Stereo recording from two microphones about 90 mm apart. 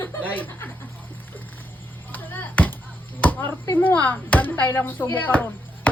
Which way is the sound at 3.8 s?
20° left (ahead or behind).